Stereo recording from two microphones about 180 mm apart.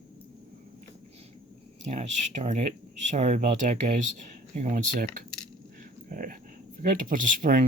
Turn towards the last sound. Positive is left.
turn(degrees=-45)  # may be behind; listen again after turning